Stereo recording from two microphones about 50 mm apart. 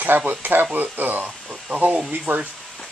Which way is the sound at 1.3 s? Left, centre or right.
Centre.